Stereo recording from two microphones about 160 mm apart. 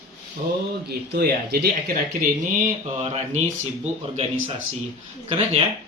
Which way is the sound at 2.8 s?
45° right (ahead or behind).